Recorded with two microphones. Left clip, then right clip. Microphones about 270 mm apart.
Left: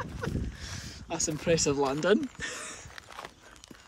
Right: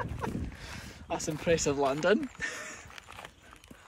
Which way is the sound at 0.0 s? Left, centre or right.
Centre.